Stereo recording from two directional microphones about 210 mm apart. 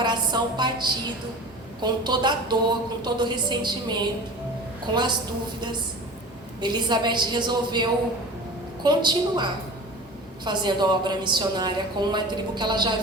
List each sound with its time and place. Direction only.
0.0 s a woman's voice: 20° right (ahead or behind)
6.6 s a woman's voice: 20° right (ahead or behind)